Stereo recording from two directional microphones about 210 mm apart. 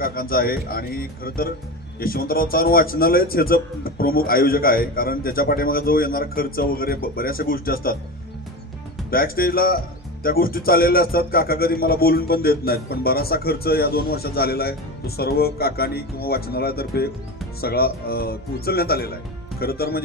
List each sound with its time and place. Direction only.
0.0 s a man's voice: 45° left (ahead or behind)
9.1 s a man's voice: 45° left (ahead or behind)